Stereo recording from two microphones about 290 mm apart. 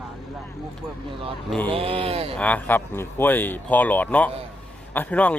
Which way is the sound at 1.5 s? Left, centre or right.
Centre.